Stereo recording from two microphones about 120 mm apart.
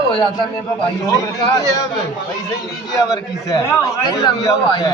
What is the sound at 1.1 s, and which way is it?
Speech, 25° left (ahead or behind).